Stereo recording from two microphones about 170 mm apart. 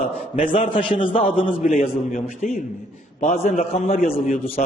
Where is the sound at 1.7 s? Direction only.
45° left (ahead or behind).